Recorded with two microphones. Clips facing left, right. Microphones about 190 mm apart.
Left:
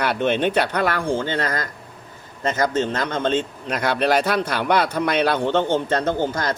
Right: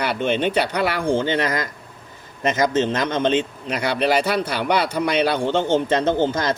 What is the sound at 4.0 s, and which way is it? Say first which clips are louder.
A man's voice: even; 5° right (ahead or behind).